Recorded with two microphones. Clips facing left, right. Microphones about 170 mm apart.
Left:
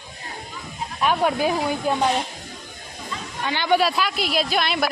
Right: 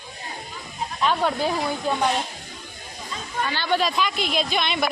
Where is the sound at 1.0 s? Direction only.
10° left (ahead or behind).